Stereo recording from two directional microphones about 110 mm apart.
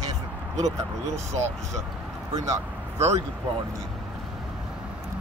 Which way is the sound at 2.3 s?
30° right (ahead or behind).